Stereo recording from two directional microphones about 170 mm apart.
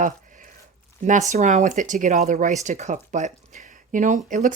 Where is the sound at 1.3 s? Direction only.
45° right (ahead or behind).